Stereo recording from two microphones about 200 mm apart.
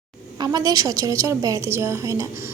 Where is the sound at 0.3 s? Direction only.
20° right (ahead or behind).